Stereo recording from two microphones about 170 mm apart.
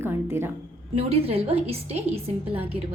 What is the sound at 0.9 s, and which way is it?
A woman's voice, 35° right (ahead or behind).